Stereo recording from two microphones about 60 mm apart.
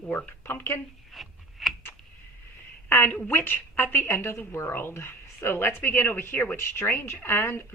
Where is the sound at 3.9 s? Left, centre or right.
Left.